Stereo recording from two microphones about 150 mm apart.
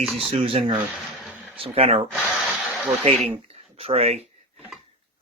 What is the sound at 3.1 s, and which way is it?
Speech, 45° right (ahead or behind).